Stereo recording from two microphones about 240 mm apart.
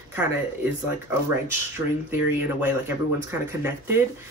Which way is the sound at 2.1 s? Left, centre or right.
Centre.